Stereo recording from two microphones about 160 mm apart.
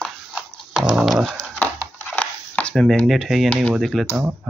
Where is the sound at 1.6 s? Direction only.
10° left (ahead or behind).